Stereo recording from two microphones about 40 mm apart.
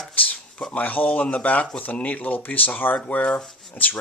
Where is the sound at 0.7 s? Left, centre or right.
Left.